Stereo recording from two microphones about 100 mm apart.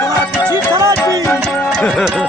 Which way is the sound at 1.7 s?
10° left (ahead or behind).